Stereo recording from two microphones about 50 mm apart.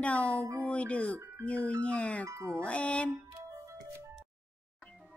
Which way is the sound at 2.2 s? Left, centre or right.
Right.